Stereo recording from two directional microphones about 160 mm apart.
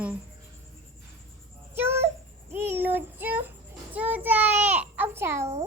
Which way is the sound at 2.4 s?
15° right (ahead or behind).